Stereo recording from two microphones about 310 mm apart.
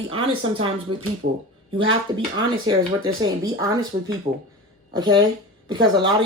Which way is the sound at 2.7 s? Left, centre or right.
Centre.